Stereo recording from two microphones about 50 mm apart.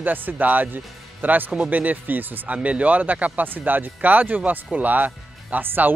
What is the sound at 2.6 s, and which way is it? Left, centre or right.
Speech, right.